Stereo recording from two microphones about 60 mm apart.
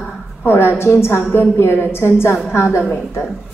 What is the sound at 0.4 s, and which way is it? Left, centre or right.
A woman's voice, left.